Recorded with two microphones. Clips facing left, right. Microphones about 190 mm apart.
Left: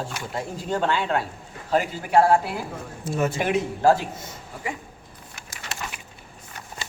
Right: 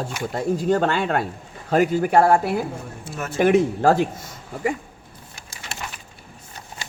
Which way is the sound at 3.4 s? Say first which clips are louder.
Right 7 dB; 50° right (ahead or behind).